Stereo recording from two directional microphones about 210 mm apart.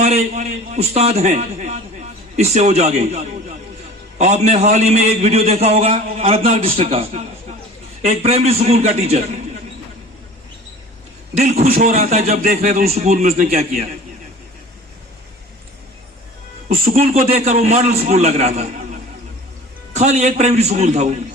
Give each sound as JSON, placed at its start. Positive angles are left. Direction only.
{"t": 0.0, "sound": "a man's voice", "side_deg": -30}
{"t": 11.3, "sound": "a man's voice", "side_deg": -30}
{"t": 16.8, "sound": "a man's voice", "side_deg": -35}
{"t": 19.9, "sound": "a man's voice", "side_deg": -30}